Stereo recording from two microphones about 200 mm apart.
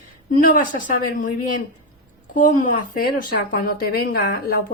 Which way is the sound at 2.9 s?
45° left (ahead or behind).